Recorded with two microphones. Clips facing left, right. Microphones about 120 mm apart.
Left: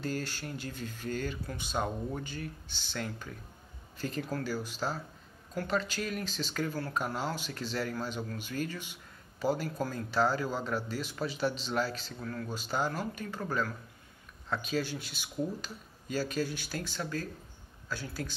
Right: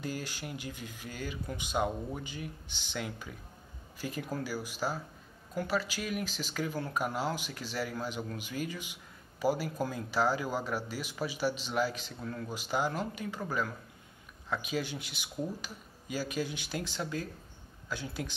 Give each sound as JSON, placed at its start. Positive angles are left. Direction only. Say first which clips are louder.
{"t": 0.0, "sound": "speech", "louder": "left 2 dB", "side_deg": -15}